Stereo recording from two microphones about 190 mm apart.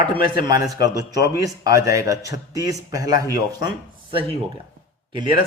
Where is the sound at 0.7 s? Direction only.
20° right (ahead or behind).